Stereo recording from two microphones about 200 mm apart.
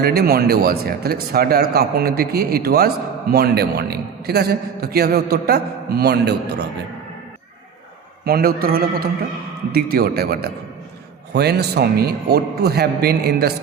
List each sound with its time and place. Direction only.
0.0 s a man's voice: 50° right (ahead or behind)
8.2 s a man's voice: 50° right (ahead or behind)